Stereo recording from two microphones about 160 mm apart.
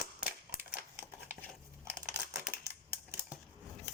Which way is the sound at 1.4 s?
5° left (ahead or behind).